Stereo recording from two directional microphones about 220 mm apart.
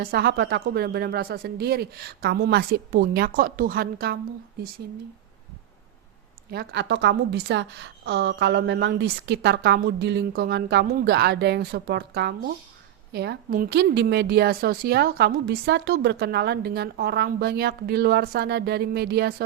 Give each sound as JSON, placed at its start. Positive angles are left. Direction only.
{"t": 0.0, "sound": "a woman's voice", "side_deg": -45}
{"t": 6.5, "sound": "a woman's voice", "side_deg": -50}